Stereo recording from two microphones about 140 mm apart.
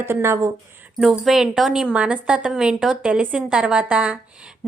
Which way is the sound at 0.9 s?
5° right (ahead or behind).